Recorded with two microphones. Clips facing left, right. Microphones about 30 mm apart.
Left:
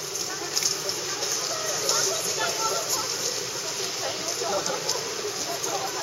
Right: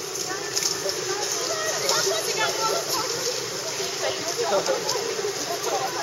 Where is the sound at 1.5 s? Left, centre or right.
Centre.